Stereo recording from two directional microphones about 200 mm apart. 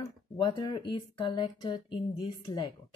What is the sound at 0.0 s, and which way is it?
Speech, 20° left (ahead or behind).